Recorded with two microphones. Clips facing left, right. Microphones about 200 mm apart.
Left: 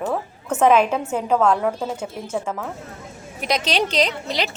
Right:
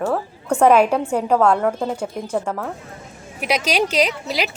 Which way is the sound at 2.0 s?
5° left (ahead or behind).